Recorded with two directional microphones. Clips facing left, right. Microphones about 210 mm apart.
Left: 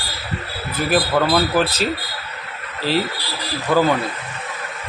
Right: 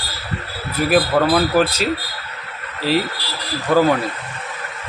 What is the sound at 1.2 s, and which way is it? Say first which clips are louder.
Speech: right 2 dB; 5° left (ahead or behind).